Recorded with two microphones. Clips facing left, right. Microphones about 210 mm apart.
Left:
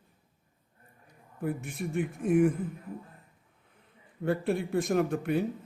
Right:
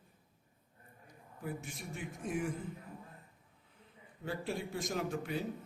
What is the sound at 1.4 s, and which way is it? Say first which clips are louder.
Speech: left 9 dB; 60° left (ahead or behind).